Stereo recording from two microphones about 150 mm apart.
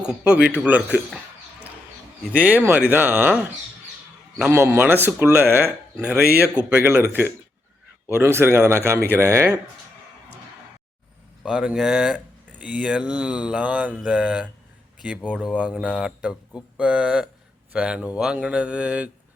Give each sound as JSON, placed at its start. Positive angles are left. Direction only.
{"t": 0.0, "sound": "mantra", "side_deg": -5}
{"t": 2.3, "sound": "mantra", "side_deg": -10}
{"t": 11.4, "sound": "mantra", "side_deg": -5}